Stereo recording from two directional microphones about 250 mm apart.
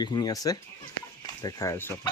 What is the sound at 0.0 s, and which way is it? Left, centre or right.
Chicken, centre.